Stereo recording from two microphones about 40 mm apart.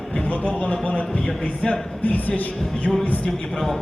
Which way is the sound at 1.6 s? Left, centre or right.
Left.